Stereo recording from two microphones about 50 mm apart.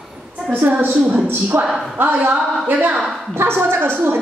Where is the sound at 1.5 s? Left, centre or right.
Right.